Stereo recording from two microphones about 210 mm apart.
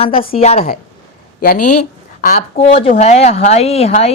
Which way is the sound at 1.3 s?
45° left (ahead or behind).